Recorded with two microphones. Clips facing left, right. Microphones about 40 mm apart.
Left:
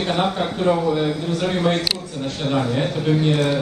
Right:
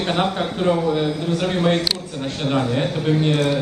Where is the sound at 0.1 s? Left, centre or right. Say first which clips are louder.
Right 1 dB; centre.